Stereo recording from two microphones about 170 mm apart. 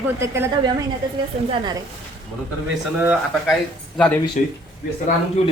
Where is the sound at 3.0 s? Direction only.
5° right (ahead or behind).